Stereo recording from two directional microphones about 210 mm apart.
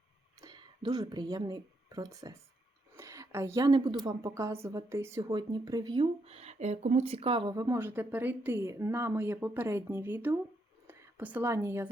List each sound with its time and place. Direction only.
0.4 s a woman's voice: 20° right (ahead or behind)